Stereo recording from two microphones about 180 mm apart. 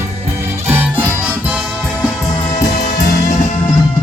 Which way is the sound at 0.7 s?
10° right (ahead or behind).